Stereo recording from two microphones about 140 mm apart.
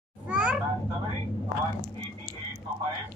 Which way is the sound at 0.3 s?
10° right (ahead or behind).